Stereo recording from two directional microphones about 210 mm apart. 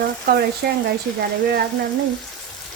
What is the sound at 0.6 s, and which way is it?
Speech, 50° right (ahead or behind).